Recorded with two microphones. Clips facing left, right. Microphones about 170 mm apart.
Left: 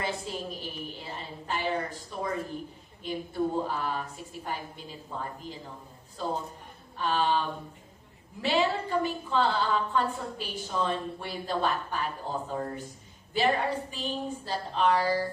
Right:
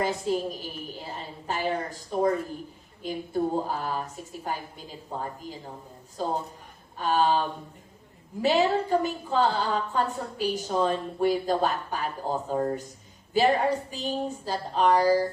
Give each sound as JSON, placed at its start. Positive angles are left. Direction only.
{"t": 0.0, "sound": "a woman's voice", "side_deg": -40}
{"t": 5.1, "sound": "a woman's voice", "side_deg": -40}
{"t": 7.0, "sound": "a woman's voice", "side_deg": -40}